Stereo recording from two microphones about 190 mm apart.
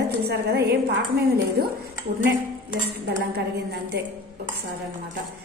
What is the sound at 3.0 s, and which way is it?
Speech, 60° right (ahead or behind).